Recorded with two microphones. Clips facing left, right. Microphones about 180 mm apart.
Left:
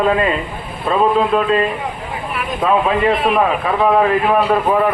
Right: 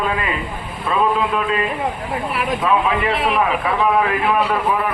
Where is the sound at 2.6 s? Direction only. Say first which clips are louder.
Left 5 dB; 40° left (ahead or behind).